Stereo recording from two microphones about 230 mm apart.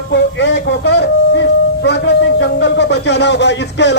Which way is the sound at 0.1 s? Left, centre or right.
Left.